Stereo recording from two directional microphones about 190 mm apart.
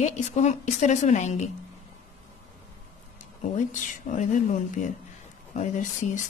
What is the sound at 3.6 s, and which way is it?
A woman's voice, 40° left (ahead or behind).